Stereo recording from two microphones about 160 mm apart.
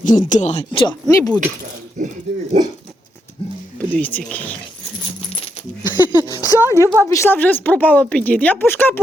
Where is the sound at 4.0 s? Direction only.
10° left (ahead or behind).